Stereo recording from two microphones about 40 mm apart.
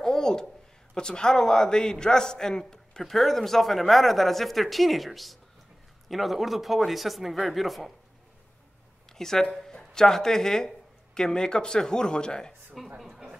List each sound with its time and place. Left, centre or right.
0.0 s a sound: centre
0.9 s a man's voice: centre
9.1 s a man's voice: centre
12.8 s speech: centre